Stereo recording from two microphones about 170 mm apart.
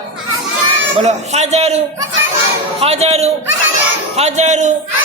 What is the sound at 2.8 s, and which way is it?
A man's voice, 40° right (ahead or behind).